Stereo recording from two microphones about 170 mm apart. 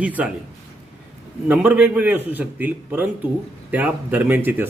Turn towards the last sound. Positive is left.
turn(degrees=-10)  # may be behind; listen again after turning